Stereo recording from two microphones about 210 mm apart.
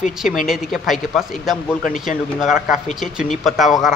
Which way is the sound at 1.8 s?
40° left (ahead or behind).